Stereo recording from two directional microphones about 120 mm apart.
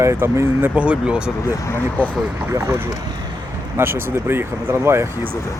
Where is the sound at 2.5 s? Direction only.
20° right (ahead or behind).